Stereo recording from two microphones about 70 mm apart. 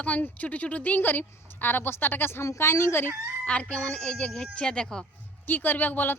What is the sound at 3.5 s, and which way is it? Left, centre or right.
Speech, centre.